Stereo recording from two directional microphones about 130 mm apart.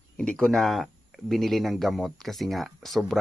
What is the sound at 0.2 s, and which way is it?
Speech, 5° left (ahead or behind).